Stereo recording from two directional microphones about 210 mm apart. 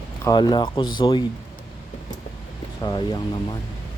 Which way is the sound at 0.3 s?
20° left (ahead or behind).